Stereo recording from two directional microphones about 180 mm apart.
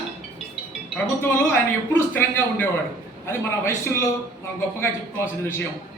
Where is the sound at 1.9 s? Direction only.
10° left (ahead or behind).